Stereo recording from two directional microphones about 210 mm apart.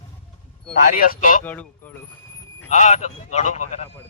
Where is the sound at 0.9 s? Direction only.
45° left (ahead or behind).